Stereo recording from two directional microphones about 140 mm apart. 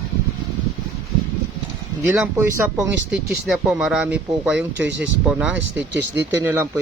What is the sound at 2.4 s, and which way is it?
Speech, 20° right (ahead or behind).